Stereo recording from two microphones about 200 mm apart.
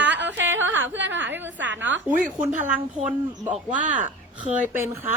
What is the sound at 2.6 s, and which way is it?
Speech, 10° right (ahead or behind).